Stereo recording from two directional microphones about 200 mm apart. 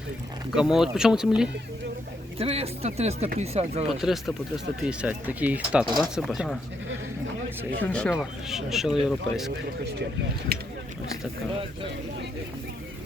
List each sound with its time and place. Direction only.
0.5 s speech: 5° right (ahead or behind)
2.4 s speech: 30° right (ahead or behind)
3.8 s speech: centre (ahead or behind)
7.8 s speech: 5° left (ahead or behind)
10.5 s speech: 50° right (ahead or behind)